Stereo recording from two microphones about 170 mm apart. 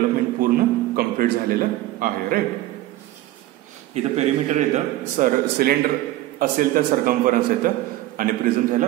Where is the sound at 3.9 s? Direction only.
40° right (ahead or behind).